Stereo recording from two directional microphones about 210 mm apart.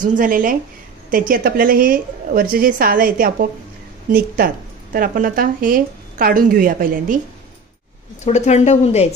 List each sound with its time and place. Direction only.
0.0 s a woman's voice: 40° right (ahead or behind)
4.9 s a woman's voice: 40° right (ahead or behind)
8.2 s speech: 35° left (ahead or behind)